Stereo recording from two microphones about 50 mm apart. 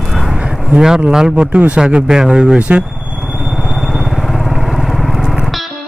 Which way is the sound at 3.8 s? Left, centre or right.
Centre.